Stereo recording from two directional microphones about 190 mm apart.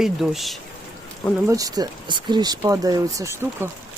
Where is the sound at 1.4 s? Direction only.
20° right (ahead or behind).